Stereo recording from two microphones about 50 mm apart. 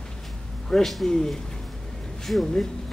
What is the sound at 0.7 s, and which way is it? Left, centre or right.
Speech, centre.